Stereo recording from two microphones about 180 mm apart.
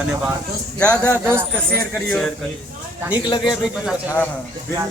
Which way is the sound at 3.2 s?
25° left (ahead or behind).